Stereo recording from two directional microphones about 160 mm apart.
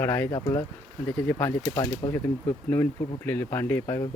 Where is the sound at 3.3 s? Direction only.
10° left (ahead or behind).